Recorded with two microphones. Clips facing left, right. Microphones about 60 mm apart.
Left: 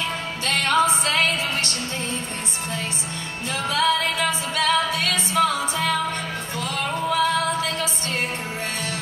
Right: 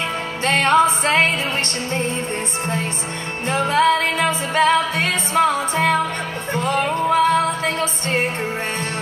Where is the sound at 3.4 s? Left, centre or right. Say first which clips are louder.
Right 6 dB; right.